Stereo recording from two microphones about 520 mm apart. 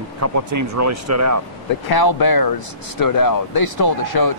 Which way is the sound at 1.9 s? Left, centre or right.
Left.